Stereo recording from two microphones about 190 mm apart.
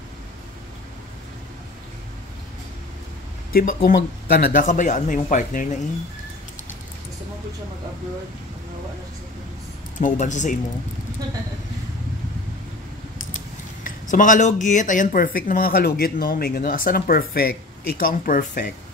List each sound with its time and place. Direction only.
3.5 s speech: 50° left (ahead or behind)
9.9 s speech: 40° left (ahead or behind)
13.8 s speech: 45° left (ahead or behind)